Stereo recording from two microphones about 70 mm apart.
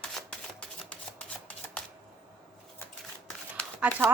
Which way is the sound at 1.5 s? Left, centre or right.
Centre.